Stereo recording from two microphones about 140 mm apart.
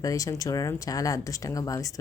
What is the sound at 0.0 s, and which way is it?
A woman's voice, 25° left (ahead or behind).